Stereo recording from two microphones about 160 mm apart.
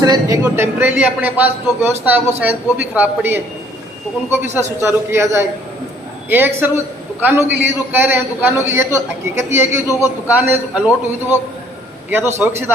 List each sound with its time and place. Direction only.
0.0 s a man's voice: 25° right (ahead or behind)
4.8 s a man's voice: 15° right (ahead or behind)
12.4 s a man's voice: 15° right (ahead or behind)